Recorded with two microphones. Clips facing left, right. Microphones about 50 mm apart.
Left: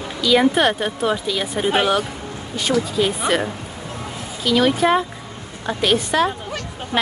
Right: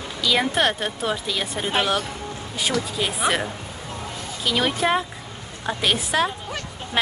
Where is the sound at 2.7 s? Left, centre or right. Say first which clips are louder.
Left 7 dB; centre.